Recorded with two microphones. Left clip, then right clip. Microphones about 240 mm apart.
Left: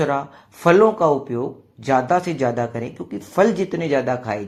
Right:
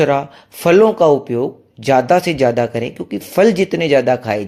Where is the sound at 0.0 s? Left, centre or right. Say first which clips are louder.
Right 7 dB; right.